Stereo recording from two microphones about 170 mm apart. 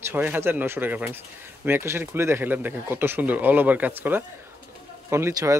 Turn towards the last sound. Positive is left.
turn(degrees=-15)  # may be behind; listen again after turning